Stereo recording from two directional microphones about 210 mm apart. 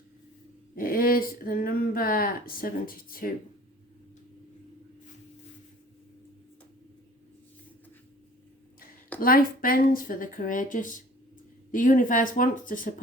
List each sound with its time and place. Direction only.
0.8 s speech: 45° left (ahead or behind)
9.2 s speech: 45° left (ahead or behind)